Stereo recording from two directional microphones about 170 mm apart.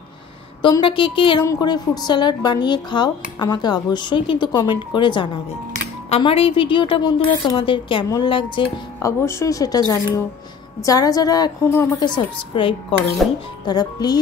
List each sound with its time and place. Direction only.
0.6 s a woman's voice: 25° left (ahead or behind)
9.0 s speech: 15° left (ahead or behind)
13.2 s speech: centre (ahead or behind)
13.7 s speech: 25° left (ahead or behind)